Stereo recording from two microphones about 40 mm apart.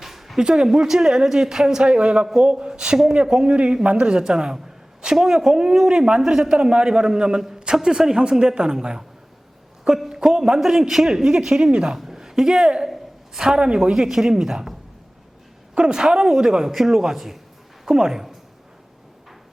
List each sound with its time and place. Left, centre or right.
0.0 s a sound: centre
0.3 s a man's voice: centre
11.9 s a sound: centre
13.3 s speech: centre
13.6 s a man's voice: right
13.9 s speech: centre
15.7 s a man's voice: right